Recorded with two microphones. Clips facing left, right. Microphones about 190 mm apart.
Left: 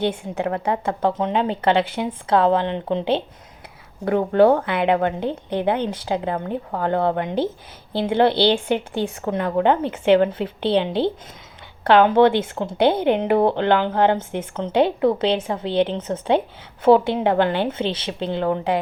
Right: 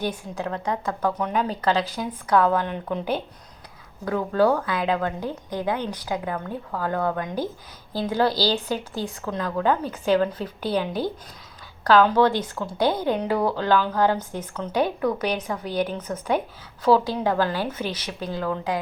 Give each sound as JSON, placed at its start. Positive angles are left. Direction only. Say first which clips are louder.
{"t": 0.0, "sound": "a woman's voice", "louder": "left 5 dB", "side_deg": 25}